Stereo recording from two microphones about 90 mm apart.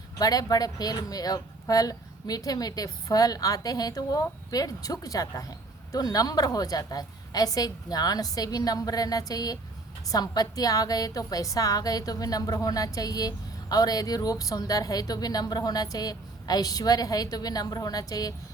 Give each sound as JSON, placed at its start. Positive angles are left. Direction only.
{"t": 0.2, "sound": "a woman's voice", "side_deg": 45}